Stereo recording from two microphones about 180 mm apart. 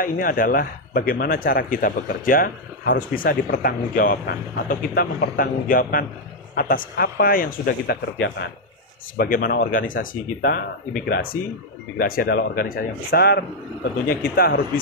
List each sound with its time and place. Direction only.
0.0 s speech: 50° left (ahead or behind)
9.1 s speech: 55° left (ahead or behind)